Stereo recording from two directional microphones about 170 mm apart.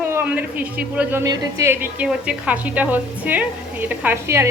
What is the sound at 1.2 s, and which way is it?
Speech, 20° right (ahead or behind).